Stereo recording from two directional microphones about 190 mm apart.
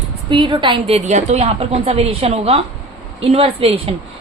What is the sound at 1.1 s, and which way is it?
A woman's voice, 35° right (ahead or behind).